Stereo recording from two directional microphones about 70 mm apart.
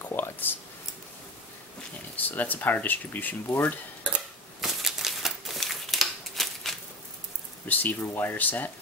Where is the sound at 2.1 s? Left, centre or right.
Left.